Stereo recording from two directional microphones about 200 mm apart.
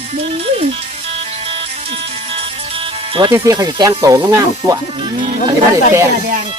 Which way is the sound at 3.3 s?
15° right (ahead or behind).